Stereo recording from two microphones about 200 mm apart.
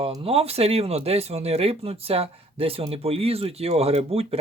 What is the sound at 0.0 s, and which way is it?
Speech, 30° right (ahead or behind).